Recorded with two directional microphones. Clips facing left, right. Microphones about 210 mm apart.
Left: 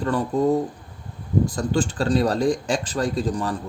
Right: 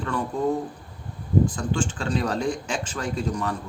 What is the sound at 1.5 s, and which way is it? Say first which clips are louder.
Speech: left 4 dB; 40° left (ahead or behind).